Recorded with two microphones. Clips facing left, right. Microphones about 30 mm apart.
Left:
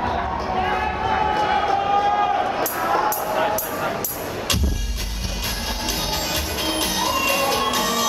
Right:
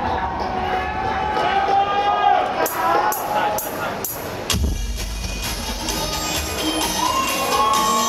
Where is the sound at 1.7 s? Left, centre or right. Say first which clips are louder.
Right 1 dB; centre.